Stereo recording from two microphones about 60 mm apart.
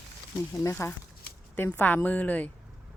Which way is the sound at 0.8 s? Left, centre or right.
Left.